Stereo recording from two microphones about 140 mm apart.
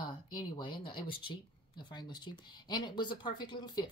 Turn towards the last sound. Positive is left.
turn(degrees=30)  # may be behind; listen again after turning